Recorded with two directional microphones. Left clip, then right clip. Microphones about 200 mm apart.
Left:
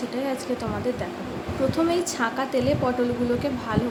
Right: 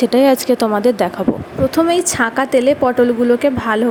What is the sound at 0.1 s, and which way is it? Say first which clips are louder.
A woman's voice: right 15 dB; 45° right (ahead or behind).